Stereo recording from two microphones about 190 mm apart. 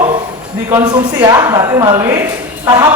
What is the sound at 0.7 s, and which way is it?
Speech, 15° right (ahead or behind).